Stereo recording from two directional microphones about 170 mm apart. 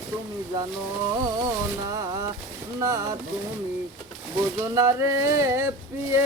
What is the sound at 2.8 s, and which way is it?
Speech, 20° right (ahead or behind).